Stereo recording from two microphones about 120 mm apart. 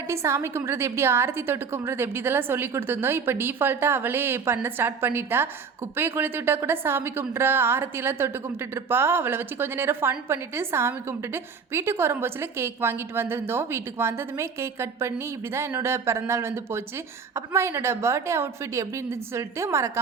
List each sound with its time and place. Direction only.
0.1 s a woman's voice: 20° right (ahead or behind)